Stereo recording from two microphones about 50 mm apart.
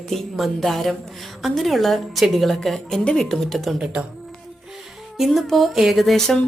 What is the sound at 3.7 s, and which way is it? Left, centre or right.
Speech, centre.